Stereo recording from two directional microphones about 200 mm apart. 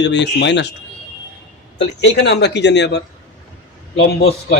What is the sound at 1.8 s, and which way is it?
Speech, 60° left (ahead or behind).